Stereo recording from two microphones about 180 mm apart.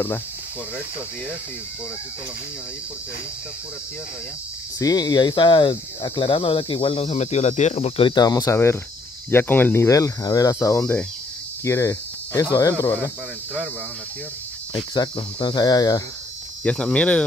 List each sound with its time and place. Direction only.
4.7 s speech: 20° left (ahead or behind); by 8.1 s 40° left (ahead or behind)
8.1 s cricket: 20° left (ahead or behind)
9.3 s speech: 10° left (ahead or behind)
11.6 s cricket: 15° left (ahead or behind)
12.8 s speech: 10° left (ahead or behind)
15.0 s cricket: 25° left (ahead or behind)
16.6 s speech: 5° left (ahead or behind)